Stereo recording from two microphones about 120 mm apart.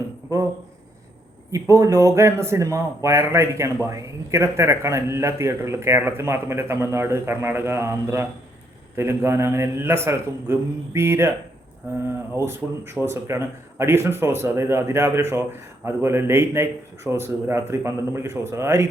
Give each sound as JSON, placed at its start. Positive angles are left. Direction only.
{"t": 0.3, "sound": "a man's voice", "side_deg": -25}
{"t": 1.5, "sound": "a man's voice", "side_deg": -25}
{"t": 12.5, "sound": "a man's voice", "side_deg": -20}